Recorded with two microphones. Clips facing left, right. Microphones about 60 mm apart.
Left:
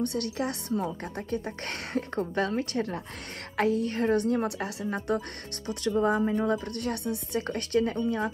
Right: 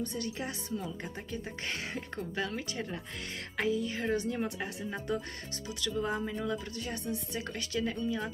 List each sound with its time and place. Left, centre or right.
0.0 s a woman's voice: left
4.8 s a woman's voice: left
6.2 s speech: left
6.5 s a woman's voice: left